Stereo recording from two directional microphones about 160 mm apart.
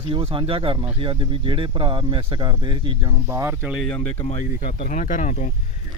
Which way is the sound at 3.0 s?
15° right (ahead or behind).